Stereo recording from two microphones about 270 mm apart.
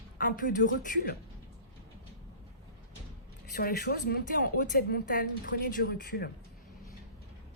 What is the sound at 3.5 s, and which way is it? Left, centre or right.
Speech, left.